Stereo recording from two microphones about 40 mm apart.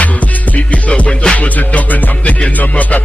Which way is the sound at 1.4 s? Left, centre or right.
Left.